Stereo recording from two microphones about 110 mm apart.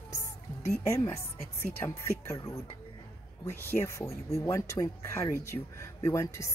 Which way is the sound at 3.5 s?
25° left (ahead or behind).